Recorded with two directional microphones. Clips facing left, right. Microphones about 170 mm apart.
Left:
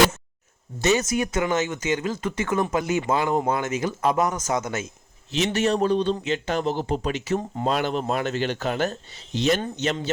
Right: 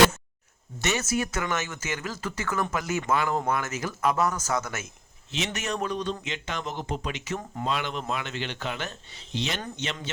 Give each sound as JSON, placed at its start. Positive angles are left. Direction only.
{"t": 0.8, "sound": "a man's voice", "side_deg": 25}